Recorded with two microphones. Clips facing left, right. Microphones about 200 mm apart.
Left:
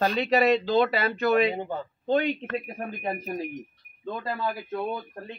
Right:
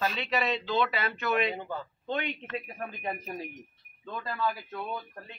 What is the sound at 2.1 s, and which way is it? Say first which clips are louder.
Speech: left 9 dB; 40° left (ahead or behind).